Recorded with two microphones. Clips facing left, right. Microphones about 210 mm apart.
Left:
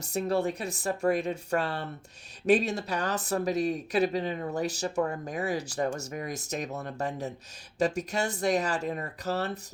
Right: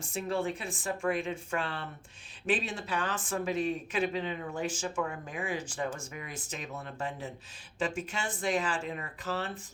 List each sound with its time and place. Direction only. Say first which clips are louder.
0.0 s speech: left 5 dB; 40° left (ahead or behind)